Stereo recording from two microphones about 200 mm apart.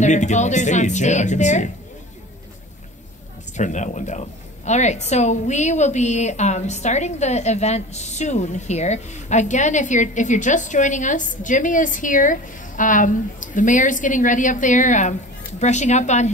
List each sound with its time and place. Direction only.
0.0 s a woman's voice: 35° left (ahead or behind)
3.5 s a woman's voice: 35° left (ahead or behind)